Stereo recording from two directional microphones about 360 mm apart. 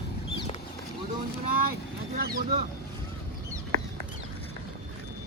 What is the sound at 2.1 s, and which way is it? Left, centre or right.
Speech, right.